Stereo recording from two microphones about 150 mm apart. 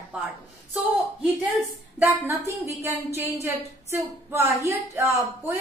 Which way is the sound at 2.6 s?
15° right (ahead or behind).